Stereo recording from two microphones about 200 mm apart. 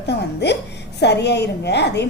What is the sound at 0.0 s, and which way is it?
A woman's voice, 55° left (ahead or behind).